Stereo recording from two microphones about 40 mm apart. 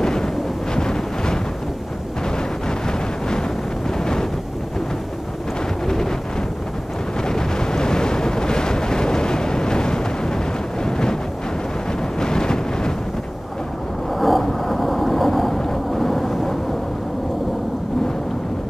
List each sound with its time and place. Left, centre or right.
0.0 s wind noise: centre
4.0 s wind noise: centre
5.9 s wind noise: centre
7.2 s wind noise: centre
10.9 s vehicle: centre
12.2 s wind noise: centre
14.1 s a sound: centre
14.4 s vehicle: centre